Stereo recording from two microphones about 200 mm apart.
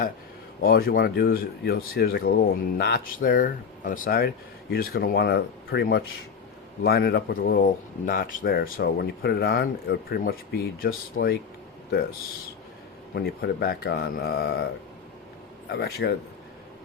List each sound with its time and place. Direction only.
0.6 s speech: 50° left (ahead or behind)
13.1 s speech: 55° left (ahead or behind)
15.7 s speech: 50° left (ahead or behind)